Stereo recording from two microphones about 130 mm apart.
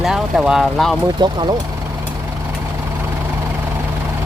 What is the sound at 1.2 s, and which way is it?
Speech, 35° right (ahead or behind).